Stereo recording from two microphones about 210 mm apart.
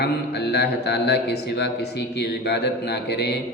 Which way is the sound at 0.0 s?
50° left (ahead or behind).